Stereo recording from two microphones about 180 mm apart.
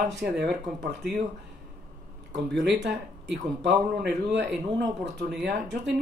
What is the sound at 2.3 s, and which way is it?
Speech, 75° right (ahead or behind).